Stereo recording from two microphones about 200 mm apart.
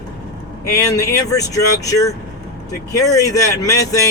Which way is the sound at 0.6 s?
15° left (ahead or behind).